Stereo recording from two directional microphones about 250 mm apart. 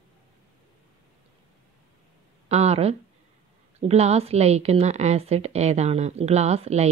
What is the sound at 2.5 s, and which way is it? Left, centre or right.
A woman's voice, right.